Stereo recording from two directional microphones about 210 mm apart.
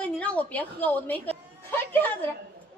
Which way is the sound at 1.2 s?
10° left (ahead or behind).